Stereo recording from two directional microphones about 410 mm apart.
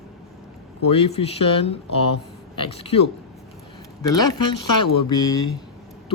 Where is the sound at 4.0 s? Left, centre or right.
Centre.